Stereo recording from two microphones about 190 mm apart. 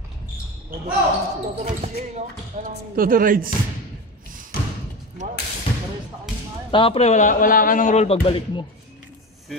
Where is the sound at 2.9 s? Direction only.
50° right (ahead or behind).